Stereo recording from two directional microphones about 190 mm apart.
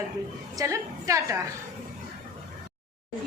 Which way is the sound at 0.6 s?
15° right (ahead or behind).